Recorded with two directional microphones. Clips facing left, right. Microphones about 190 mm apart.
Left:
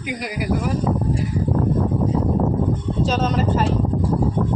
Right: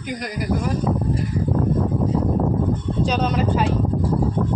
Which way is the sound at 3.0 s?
Centre (ahead or behind).